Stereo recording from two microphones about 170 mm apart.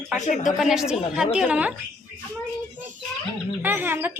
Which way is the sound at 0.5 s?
Centre (ahead or behind).